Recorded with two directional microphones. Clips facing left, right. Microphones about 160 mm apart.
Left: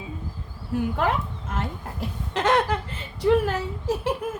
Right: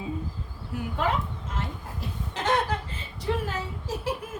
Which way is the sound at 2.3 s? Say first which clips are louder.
Left 5 dB; 90° left.